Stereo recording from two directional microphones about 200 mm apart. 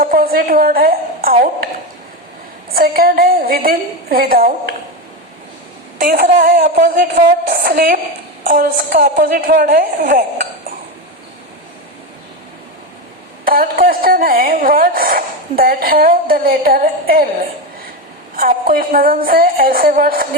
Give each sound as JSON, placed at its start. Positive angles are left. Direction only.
{"t": 0.0, "sound": "a sound", "side_deg": -45}
{"t": 2.6, "sound": "a woman's voice", "side_deg": -50}
{"t": 6.0, "sound": "a woman's voice", "side_deg": -45}
{"t": 13.4, "sound": "a woman's voice", "side_deg": -45}
{"t": 18.3, "sound": "a woman's voice", "side_deg": -45}